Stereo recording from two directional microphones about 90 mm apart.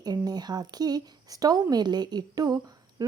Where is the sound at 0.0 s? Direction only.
50° right (ahead or behind).